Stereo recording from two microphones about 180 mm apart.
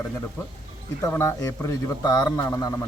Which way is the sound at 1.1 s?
15° left (ahead or behind).